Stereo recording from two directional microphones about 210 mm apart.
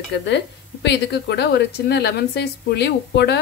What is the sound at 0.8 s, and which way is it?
A woman's voice, 50° left (ahead or behind).